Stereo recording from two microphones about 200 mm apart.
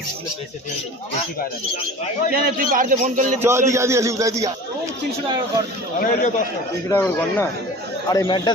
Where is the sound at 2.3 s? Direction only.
45° right (ahead or behind).